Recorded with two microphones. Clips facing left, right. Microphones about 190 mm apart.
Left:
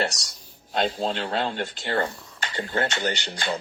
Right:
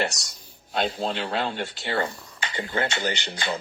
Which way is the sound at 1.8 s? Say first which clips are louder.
Left 1 dB; 10° right (ahead or behind).